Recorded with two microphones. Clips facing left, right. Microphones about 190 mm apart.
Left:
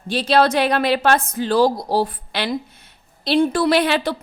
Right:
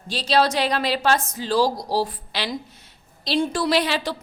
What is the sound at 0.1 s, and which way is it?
A woman's voice, 55° left (ahead or behind).